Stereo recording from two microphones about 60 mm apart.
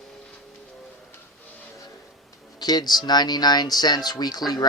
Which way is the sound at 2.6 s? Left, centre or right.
Left.